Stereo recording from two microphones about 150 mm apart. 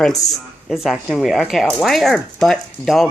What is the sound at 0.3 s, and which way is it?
Speech, centre (ahead or behind).